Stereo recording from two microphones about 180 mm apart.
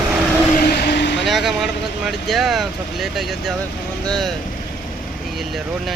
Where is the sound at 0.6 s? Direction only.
60° left (ahead or behind).